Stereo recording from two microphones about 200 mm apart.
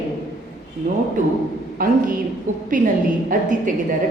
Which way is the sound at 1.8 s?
45° right (ahead or behind).